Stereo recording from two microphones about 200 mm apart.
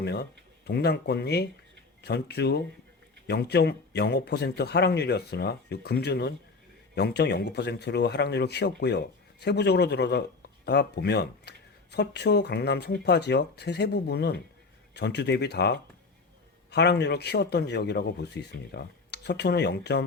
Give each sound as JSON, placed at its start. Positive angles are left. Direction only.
{"t": 0.0, "sound": "speech", "side_deg": 55}